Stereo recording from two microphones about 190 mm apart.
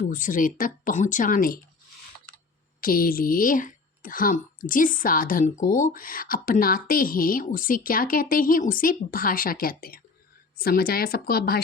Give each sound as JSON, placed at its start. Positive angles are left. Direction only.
{"t": 0.0, "sound": "a woman's voice", "side_deg": 45}
{"t": 2.8, "sound": "a woman's voice", "side_deg": 50}